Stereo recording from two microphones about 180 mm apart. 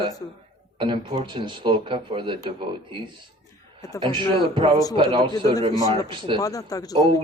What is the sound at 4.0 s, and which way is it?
Speech, 25° right (ahead or behind).